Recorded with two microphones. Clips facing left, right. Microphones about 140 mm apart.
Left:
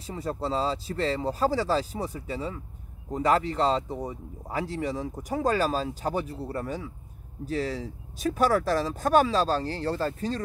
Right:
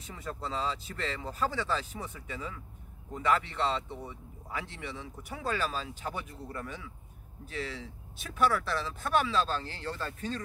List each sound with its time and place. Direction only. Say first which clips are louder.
0.0 s speech: left 8 dB; 35° left (ahead or behind)